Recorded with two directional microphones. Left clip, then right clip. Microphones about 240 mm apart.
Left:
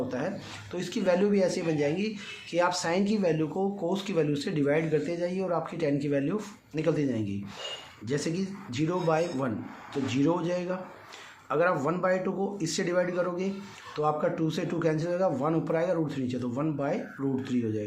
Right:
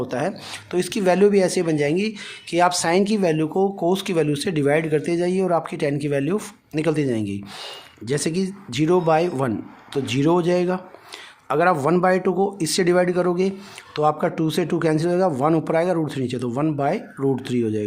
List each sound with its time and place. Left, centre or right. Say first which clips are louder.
0.1 s speech: right 8 dB; right